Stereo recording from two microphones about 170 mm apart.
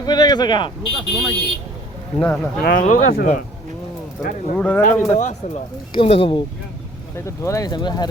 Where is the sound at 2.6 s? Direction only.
55° left (ahead or behind).